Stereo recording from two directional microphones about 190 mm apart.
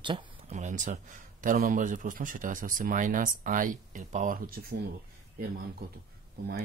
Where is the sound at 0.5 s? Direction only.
40° right (ahead or behind).